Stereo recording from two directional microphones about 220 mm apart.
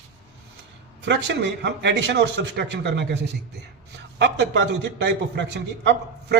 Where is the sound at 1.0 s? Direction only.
50° right (ahead or behind).